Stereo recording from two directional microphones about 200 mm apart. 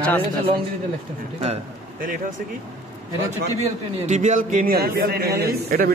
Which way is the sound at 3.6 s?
35° right (ahead or behind).